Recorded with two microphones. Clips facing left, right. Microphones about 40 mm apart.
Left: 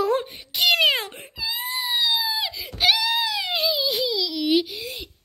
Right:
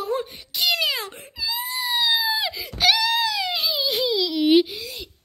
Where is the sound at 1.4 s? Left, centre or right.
Left.